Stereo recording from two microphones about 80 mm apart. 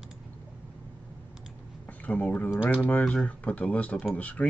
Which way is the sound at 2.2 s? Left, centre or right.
Centre.